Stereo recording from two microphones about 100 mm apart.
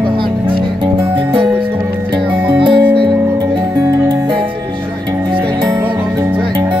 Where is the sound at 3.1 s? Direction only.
40° right (ahead or behind).